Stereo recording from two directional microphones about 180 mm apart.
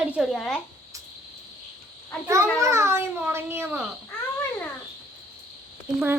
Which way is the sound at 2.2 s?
15° right (ahead or behind).